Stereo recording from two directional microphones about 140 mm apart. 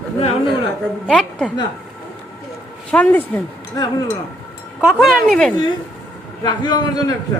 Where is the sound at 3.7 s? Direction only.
25° left (ahead or behind).